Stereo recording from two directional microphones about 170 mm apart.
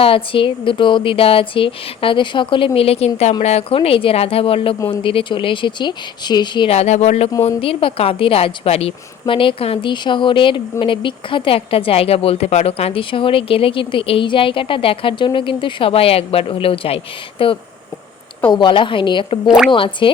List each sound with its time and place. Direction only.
0.0 s a woman's voice: 30° left (ahead or behind)
6.7 s a woman's voice: 40° left (ahead or behind)
19.5 s speech: 5° right (ahead or behind)
19.7 s speech: 30° left (ahead or behind)